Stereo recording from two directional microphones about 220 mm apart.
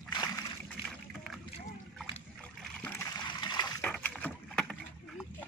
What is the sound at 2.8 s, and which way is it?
Splash, 10° left (ahead or behind).